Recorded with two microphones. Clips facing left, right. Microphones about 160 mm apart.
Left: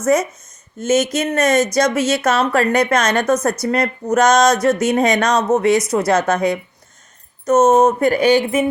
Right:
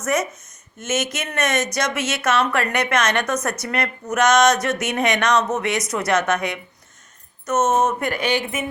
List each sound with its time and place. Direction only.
0.0 s speech: 30° left (ahead or behind)